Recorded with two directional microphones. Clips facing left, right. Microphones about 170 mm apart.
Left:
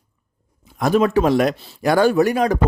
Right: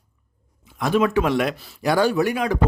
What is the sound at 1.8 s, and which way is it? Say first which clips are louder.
Speech: left 4 dB; 50° left (ahead or behind).